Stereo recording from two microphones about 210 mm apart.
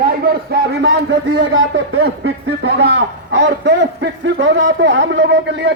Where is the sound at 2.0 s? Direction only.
55° right (ahead or behind).